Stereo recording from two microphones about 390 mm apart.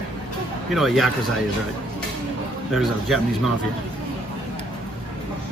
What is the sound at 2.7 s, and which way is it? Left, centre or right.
Speech, centre.